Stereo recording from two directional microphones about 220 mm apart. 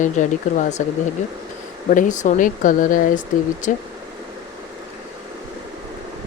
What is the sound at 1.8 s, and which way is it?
Speech, 35° left (ahead or behind).